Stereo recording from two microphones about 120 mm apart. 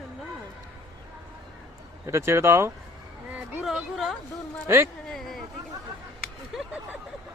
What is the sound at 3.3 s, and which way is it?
Speech, 5° right (ahead or behind).